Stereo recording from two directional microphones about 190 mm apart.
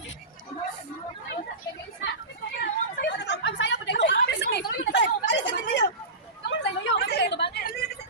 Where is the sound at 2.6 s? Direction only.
60° left (ahead or behind).